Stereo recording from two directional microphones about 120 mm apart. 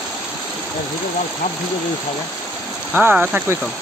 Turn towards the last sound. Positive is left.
turn(degrees=-15)  # may be behind; listen again after turning